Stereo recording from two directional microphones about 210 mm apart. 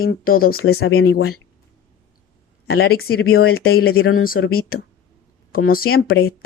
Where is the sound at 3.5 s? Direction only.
45° left (ahead or behind).